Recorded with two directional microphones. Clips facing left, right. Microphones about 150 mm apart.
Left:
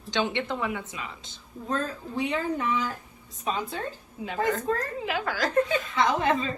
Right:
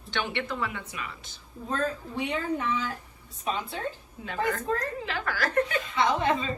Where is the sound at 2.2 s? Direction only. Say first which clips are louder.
Left 1 dB; 40° left (ahead or behind).